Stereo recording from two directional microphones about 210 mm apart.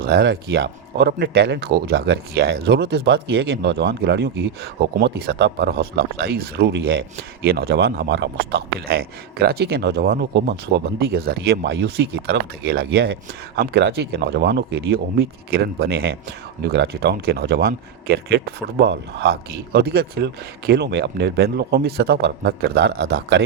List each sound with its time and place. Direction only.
0.0 s speech: 50° right (ahead or behind)